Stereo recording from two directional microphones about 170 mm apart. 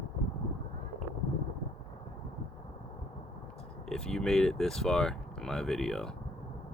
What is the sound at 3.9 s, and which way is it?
Speech, 5° left (ahead or behind).